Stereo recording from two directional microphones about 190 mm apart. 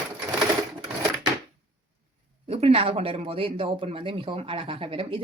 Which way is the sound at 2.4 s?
30° right (ahead or behind).